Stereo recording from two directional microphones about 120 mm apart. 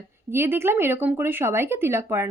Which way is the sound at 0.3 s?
20° right (ahead or behind).